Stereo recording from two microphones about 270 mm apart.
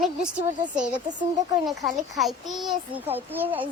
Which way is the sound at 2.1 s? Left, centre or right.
Centre.